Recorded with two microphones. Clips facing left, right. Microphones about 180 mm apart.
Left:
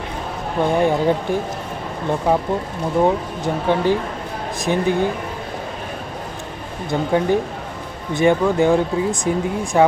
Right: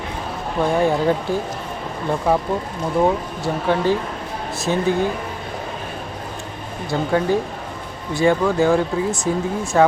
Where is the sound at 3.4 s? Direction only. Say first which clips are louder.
Left 1 dB; 15° left (ahead or behind).